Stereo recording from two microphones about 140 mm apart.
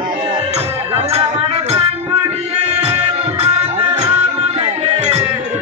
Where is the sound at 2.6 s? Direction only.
50° right (ahead or behind).